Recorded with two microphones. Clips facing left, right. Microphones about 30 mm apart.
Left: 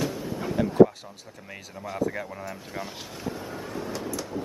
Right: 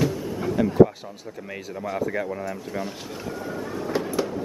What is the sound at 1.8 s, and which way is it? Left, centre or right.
Speech, centre.